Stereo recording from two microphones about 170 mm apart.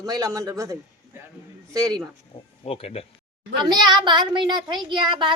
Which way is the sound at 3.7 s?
25° right (ahead or behind).